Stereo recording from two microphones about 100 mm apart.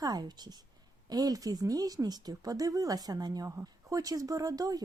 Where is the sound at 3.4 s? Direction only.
30° right (ahead or behind).